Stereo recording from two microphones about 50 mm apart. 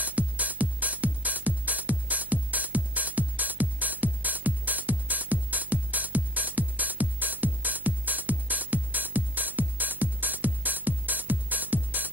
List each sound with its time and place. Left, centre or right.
0.0 s music: right